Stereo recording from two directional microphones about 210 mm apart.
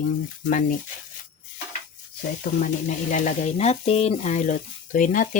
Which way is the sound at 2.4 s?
40° left (ahead or behind).